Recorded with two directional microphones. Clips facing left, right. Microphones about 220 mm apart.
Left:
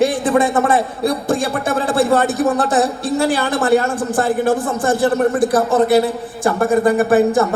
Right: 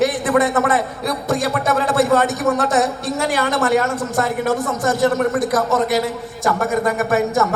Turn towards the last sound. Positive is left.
turn(degrees=30)  # may be behind; listen again after turning